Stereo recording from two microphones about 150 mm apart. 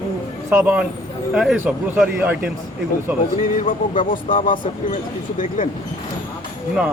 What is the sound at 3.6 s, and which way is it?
Speech, 60° left (ahead or behind).